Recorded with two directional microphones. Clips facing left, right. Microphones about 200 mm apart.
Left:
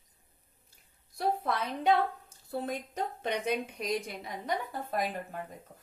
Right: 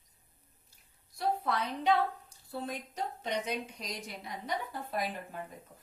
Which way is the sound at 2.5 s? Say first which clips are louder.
Left 4 dB; 55° left (ahead or behind).